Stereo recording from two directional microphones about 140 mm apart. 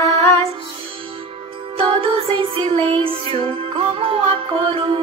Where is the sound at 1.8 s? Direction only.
40° right (ahead or behind).